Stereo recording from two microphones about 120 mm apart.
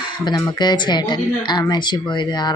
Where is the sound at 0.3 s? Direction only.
35° left (ahead or behind).